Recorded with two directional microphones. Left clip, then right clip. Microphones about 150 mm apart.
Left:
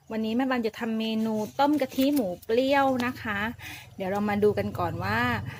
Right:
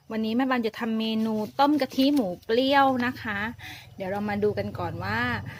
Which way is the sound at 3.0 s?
5° right (ahead or behind).